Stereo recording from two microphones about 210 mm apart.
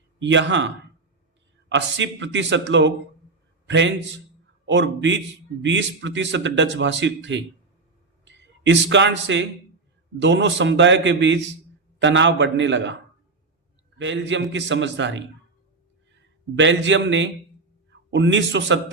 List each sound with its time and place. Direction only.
0.2 s speech: 60° right (ahead or behind)
1.7 s a man's voice: 60° right (ahead or behind)
14.0 s a man's voice: 60° right (ahead or behind)